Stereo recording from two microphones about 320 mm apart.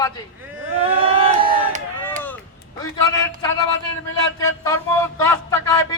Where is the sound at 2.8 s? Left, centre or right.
Centre.